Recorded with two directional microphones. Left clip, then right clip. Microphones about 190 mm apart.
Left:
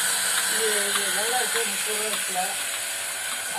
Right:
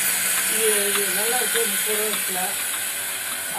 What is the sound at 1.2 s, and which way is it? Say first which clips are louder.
Speech: right 2 dB; 35° right (ahead or behind).